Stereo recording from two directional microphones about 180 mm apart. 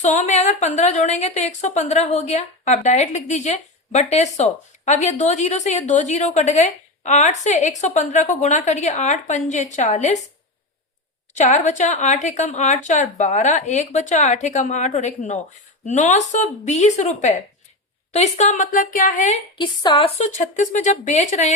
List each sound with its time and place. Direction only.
0.0 s a woman's voice: 40° left (ahead or behind)
11.3 s a woman's voice: 40° left (ahead or behind)
19.5 s a woman's voice: 25° left (ahead or behind); by 21.5 s 40° left (ahead or behind)